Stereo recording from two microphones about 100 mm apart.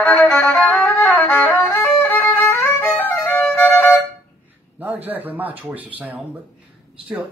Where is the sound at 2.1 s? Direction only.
20° left (ahead or behind).